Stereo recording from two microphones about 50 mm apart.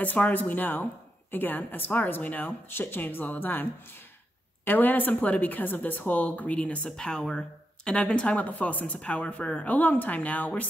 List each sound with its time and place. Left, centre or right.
0.0 s a woman's voice: left
4.6 s a woman's voice: left
7.0 s speech: centre
9.8 s a woman's voice: left